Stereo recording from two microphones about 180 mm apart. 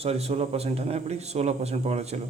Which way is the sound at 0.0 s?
35° right (ahead or behind).